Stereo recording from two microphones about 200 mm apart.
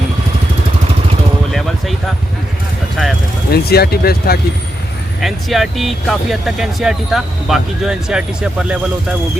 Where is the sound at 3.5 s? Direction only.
50° left (ahead or behind).